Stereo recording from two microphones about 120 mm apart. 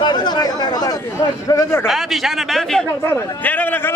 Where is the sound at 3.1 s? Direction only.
15° left (ahead or behind).